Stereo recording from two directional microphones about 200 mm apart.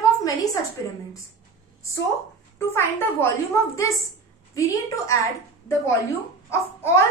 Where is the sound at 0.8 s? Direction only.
15° left (ahead or behind).